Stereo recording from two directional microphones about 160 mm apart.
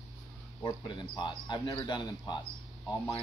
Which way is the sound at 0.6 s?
30° left (ahead or behind).